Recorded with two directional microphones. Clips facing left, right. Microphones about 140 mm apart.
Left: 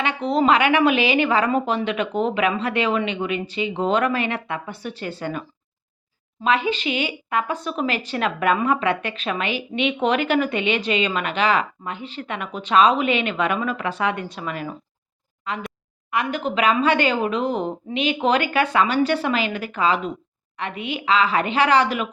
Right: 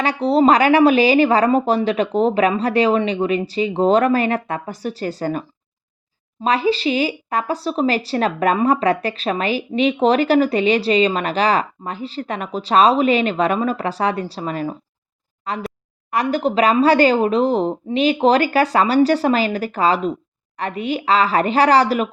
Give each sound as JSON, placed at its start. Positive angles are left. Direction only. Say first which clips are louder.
{"t": 0.0, "sound": "speech", "louder": "right 5 dB", "side_deg": -35}